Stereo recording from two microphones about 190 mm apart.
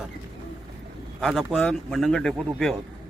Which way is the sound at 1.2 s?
Centre (ahead or behind).